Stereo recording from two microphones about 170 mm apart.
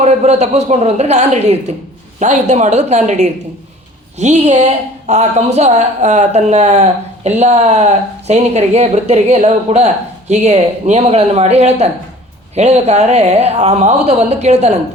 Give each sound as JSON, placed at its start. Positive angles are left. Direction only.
{"t": 0.0, "sound": "a woman's voice", "side_deg": -40}